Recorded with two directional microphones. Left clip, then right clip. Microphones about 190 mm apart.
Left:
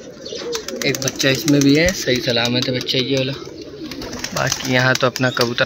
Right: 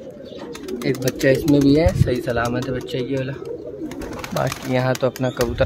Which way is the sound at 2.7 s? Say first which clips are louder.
Left 5 dB; 30° right (ahead or behind).